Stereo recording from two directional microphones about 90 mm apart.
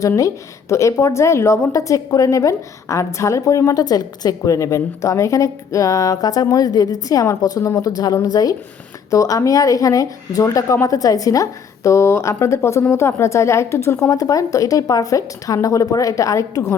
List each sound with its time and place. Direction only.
0.7 s a woman's voice: 35° left (ahead or behind)